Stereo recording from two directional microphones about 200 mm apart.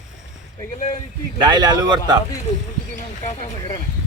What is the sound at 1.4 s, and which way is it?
Speech, 20° right (ahead or behind).